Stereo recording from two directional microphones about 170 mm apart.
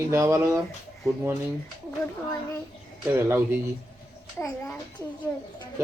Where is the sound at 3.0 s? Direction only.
10° right (ahead or behind).